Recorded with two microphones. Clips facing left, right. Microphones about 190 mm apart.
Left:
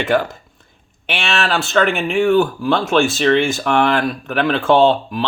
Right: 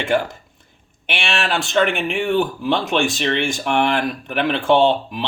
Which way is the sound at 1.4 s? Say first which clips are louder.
Left 2 dB; 15° right (ahead or behind).